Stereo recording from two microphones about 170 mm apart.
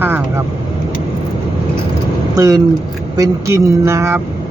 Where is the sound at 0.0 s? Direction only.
15° right (ahead or behind).